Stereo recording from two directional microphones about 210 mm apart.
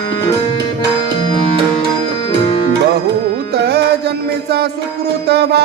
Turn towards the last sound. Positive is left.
turn(degrees=-50)  # may be behind; listen again after turning